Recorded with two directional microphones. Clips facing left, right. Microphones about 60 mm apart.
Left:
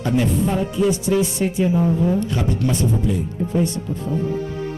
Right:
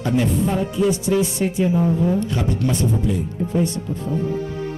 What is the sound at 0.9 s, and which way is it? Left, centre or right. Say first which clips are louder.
Speech: even; centre.